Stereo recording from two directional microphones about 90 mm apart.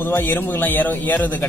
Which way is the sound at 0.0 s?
20° left (ahead or behind).